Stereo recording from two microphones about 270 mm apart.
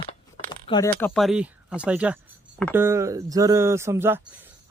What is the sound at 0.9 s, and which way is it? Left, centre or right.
Speech, centre.